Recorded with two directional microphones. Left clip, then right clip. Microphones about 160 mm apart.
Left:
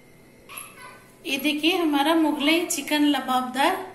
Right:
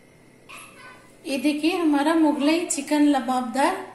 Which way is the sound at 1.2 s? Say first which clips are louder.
Even; 40° right (ahead or behind).